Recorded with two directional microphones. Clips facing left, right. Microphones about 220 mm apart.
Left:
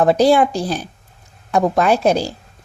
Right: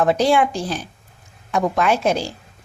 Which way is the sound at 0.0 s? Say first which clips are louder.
Left 4 dB; 35° left (ahead or behind).